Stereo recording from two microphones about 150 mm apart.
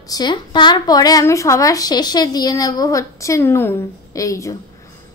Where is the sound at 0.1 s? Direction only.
30° left (ahead or behind).